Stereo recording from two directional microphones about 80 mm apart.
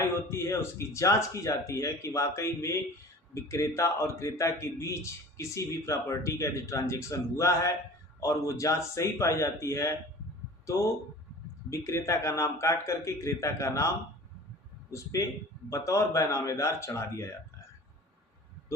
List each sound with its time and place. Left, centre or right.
0.0 s speech: left
11.7 s speech: left
15.7 s speech: left